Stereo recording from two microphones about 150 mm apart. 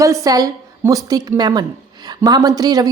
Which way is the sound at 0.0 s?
20° right (ahead or behind).